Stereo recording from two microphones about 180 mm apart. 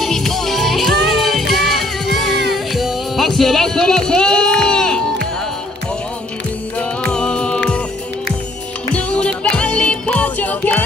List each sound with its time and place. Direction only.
0.0 s music: centre (ahead or behind)
7.0 s music: 5° left (ahead or behind)
8.9 s music: 5° left (ahead or behind)